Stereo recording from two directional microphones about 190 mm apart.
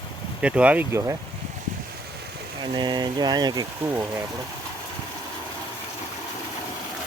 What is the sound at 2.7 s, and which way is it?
Speech, 25° right (ahead or behind).